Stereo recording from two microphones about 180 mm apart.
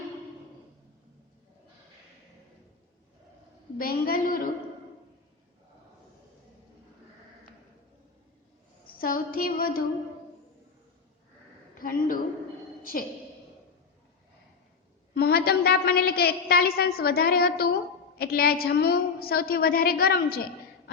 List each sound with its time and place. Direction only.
3.8 s a woman's voice: 55° left (ahead or behind)
8.9 s a sound: 55° left (ahead or behind)
11.7 s a woman's voice: 50° left (ahead or behind)
15.1 s a woman's voice: 60° left (ahead or behind)